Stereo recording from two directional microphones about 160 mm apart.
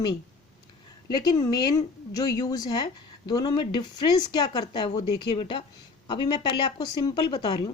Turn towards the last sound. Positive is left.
turn(degrees=25)  # may be behind; listen again after turning